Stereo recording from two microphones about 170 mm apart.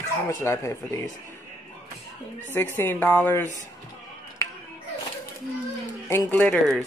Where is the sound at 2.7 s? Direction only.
10° left (ahead or behind).